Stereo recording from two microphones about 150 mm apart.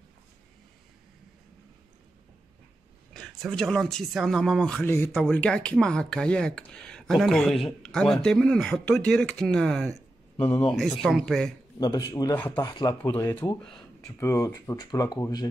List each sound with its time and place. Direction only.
3.1 s speech: 5° left (ahead or behind)
11.8 s speech: 25° left (ahead or behind)
12.4 s speech: 10° left (ahead or behind)
12.6 s speech: 30° left (ahead or behind)
13.1 s speech: 15° left (ahead or behind)
14.2 s speech: 20° left (ahead or behind)